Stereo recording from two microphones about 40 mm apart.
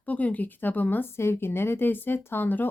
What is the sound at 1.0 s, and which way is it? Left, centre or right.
Speech, left.